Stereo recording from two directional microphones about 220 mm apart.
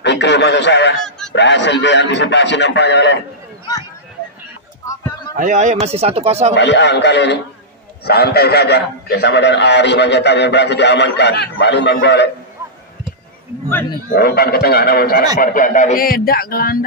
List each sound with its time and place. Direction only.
0.0 s radio: 50° left (ahead or behind)
1.3 s a man's voice: 55° left (ahead or behind)
5.4 s speech: 35° right (ahead or behind)
6.5 s a man's voice: 55° left (ahead or behind)
14.1 s a man's voice: 45° left (ahead or behind)